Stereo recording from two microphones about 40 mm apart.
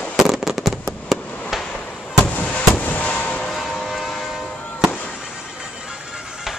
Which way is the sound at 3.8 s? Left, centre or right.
Centre.